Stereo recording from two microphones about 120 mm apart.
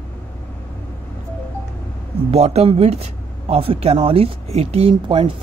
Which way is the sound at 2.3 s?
60° right (ahead or behind).